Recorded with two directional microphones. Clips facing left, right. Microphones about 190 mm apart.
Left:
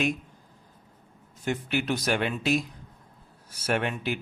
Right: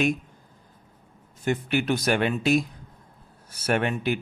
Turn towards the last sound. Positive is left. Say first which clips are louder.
# right 3 dB
turn(degrees=-50)  # may be behind; listen again after turning